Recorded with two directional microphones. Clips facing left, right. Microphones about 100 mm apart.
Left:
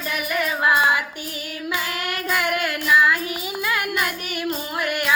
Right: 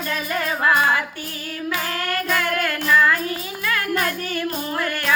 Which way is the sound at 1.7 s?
15° left (ahead or behind).